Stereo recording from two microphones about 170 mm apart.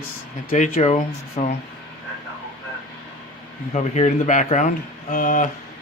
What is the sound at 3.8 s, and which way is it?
A man's voice, 40° left (ahead or behind).